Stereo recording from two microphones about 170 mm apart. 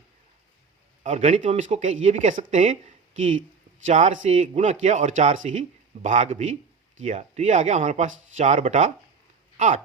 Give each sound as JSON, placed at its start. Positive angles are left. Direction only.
{"t": 1.0, "sound": "speech", "side_deg": -45}
{"t": 3.8, "sound": "speech", "side_deg": -45}